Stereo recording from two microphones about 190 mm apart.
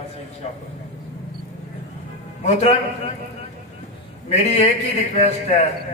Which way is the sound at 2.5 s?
35° left (ahead or behind).